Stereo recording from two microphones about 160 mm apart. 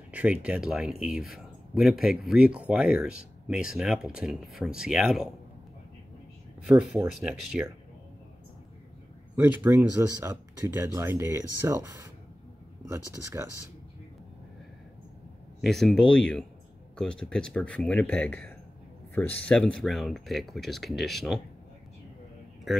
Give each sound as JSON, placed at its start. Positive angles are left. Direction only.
{"t": 0.1, "sound": "speech", "side_deg": -10}
{"t": 6.6, "sound": "speech", "side_deg": -5}
{"t": 9.3, "sound": "speech", "side_deg": -15}
{"t": 15.6, "sound": "speech", "side_deg": 0}
{"t": 22.7, "sound": "speech", "side_deg": 0}